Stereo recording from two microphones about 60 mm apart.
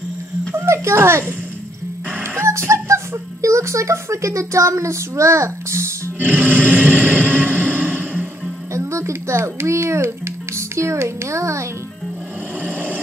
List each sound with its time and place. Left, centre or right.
0.6 s a child's voice: right
2.4 s a child's voice: right
6.1 s music: right
8.7 s a child's voice: right
12.6 s a sound: right